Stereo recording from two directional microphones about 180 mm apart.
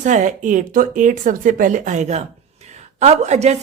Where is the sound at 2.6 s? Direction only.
40° right (ahead or behind).